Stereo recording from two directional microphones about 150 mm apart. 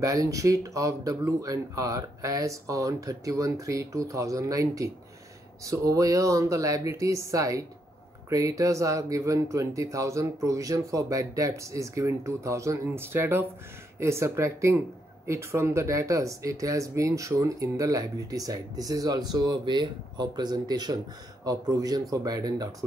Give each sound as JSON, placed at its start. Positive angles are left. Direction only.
{"t": 0.0, "sound": "speech", "side_deg": -20}